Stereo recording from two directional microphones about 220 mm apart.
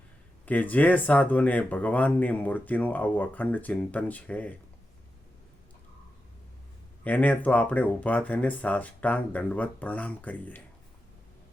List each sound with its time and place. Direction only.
0.4 s speech: 5° left (ahead or behind)
7.0 s speech: 5° left (ahead or behind)